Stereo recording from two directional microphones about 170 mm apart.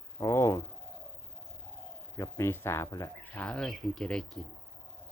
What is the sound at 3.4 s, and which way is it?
Speech, 5° left (ahead or behind).